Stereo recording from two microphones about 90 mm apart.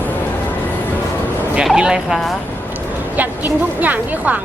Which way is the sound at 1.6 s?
10° right (ahead or behind).